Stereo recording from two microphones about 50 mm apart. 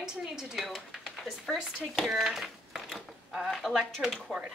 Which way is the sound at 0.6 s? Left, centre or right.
Centre.